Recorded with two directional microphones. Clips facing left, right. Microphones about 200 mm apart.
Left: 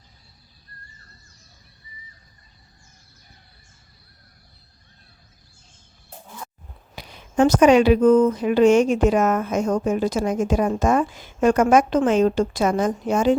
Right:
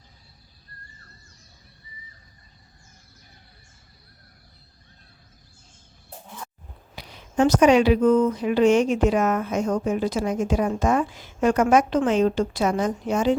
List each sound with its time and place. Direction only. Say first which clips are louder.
6.9 s speech: left 2 dB; 45° left (ahead or behind)